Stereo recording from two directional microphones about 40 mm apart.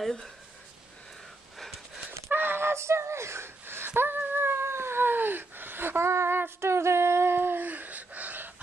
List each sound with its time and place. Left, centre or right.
2.0 s gasp: right
7.5 s gasp: right